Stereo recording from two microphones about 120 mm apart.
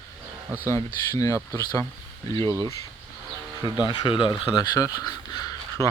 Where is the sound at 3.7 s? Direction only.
40° left (ahead or behind).